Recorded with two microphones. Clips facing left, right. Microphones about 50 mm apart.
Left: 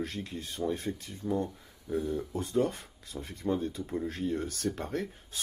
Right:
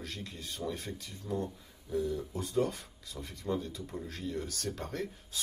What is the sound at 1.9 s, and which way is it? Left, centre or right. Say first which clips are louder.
Speech: left 2 dB; left.